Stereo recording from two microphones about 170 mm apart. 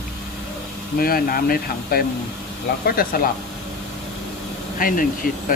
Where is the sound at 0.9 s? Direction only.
60° left (ahead or behind).